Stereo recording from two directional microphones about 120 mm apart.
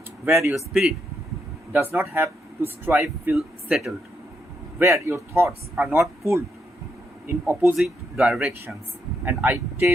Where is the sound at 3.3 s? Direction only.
Centre (ahead or behind).